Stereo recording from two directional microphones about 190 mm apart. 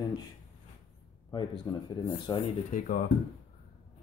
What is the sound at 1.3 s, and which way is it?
Speech, 25° left (ahead or behind).